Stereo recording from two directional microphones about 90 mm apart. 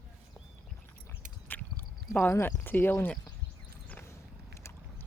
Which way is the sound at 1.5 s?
20° left (ahead or behind).